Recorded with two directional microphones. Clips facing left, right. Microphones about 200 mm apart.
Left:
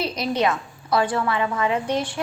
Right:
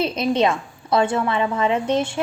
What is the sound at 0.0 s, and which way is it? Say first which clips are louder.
A woman's voice: right 4 dB; 25° right (ahead or behind).